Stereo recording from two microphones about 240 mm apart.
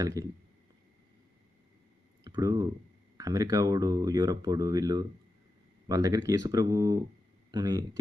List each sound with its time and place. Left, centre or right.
0.0 s speech: centre
2.2 s speech: centre